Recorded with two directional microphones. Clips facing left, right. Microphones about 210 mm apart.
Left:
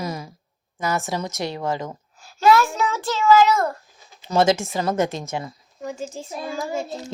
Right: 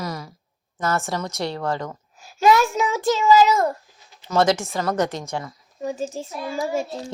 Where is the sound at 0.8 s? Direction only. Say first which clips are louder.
Even; 15° left (ahead or behind).